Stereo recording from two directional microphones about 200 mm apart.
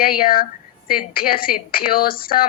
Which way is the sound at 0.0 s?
45° left (ahead or behind).